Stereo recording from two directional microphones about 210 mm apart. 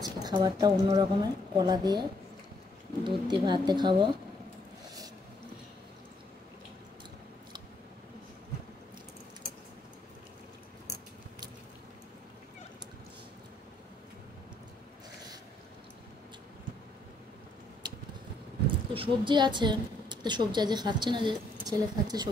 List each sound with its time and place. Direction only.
0.0 s a woman's voice: 20° right (ahead or behind)
17.8 s a sound: 20° right (ahead or behind)
18.9 s a woman's voice: 20° right (ahead or behind)